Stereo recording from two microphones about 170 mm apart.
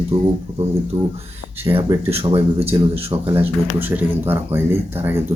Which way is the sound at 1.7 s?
20° right (ahead or behind).